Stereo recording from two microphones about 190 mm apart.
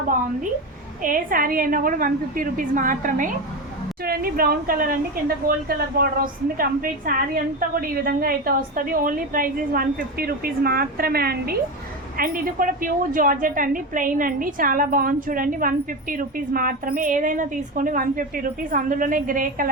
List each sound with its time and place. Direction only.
1.0 s a woman's voice: 45° right (ahead or behind)